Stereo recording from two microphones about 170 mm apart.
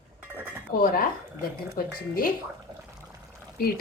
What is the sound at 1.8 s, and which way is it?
Speech, 60° left (ahead or behind).